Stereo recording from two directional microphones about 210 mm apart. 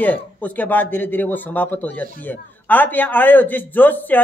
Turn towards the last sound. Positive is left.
turn(degrees=10)  # may be behind; listen again after turning